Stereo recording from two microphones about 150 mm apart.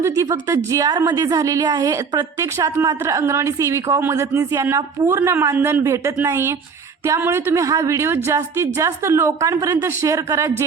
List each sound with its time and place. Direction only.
0.0 s a woman's voice: 20° right (ahead or behind)